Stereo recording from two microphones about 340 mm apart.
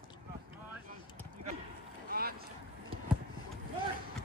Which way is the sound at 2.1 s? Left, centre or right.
Right.